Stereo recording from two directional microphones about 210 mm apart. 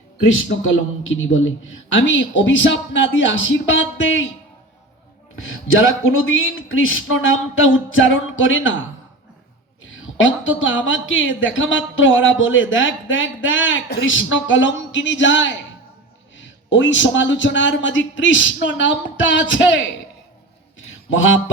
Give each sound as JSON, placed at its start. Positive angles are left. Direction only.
{"t": 0.2, "sound": "a woman's voice", "side_deg": 65}
{"t": 5.4, "sound": "speech", "side_deg": 65}
{"t": 9.8, "sound": "a woman's voice", "side_deg": 65}
{"t": 20.7, "sound": "a sound", "side_deg": 65}